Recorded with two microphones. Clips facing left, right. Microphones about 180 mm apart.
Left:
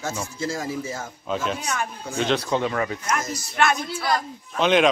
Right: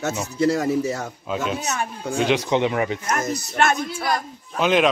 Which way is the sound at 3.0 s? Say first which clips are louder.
Right 3 dB; 55° right (ahead or behind).